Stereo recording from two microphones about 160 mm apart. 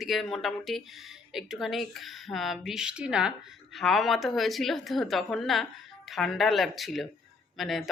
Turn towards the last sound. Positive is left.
turn(degrees=0)  # may be behind; listen again after turning